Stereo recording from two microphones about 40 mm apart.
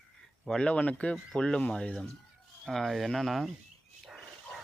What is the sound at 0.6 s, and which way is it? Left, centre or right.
Speech, left.